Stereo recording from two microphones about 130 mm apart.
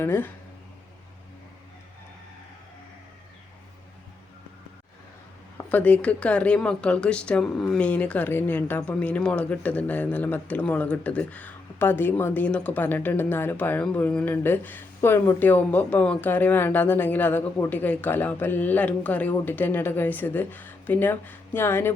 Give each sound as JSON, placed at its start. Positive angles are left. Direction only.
{"t": 0.0, "sound": "a woman's voice", "side_deg": 15}
{"t": 5.5, "sound": "a woman's voice", "side_deg": 15}